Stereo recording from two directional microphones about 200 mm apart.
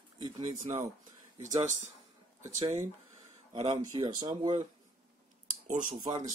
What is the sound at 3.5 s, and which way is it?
Speech, 20° right (ahead or behind).